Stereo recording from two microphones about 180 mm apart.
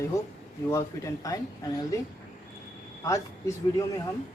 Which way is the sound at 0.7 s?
15° left (ahead or behind).